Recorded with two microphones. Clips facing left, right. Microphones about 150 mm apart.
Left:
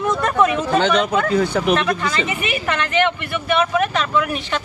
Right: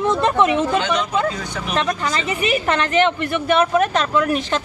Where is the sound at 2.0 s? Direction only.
35° right (ahead or behind).